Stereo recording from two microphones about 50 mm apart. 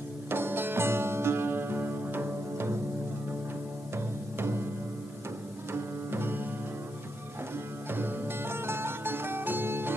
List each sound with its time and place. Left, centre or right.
0.3 s music: right
3.9 s music: right
5.7 s music: right
7.9 s music: right